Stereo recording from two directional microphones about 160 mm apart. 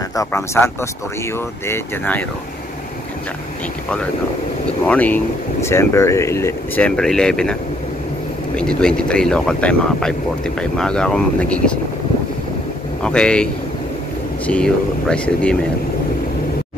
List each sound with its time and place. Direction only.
0.1 s speech: 20° left (ahead or behind)
4.8 s speech: 10° left (ahead or behind)
8.5 s speech: 5° left (ahead or behind)
13.0 s speech: 5° left (ahead or behind)
14.5 s speech: 5° left (ahead or behind)